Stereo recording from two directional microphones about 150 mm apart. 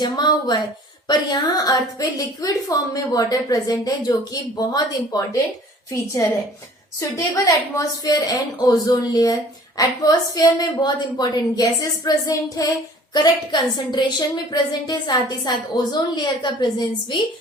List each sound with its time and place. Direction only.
0.0 s a woman's voice: 30° left (ahead or behind)
7.0 s a woman's voice: 20° left (ahead or behind)